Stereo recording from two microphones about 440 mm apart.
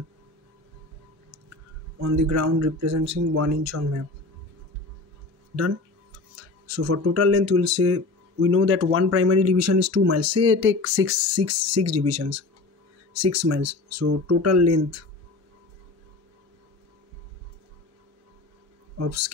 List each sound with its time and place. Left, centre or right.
1.5 s speech: right
6.7 s speech: right
18.9 s speech: right